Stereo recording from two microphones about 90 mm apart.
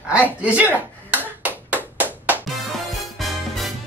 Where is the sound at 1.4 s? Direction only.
20° right (ahead or behind).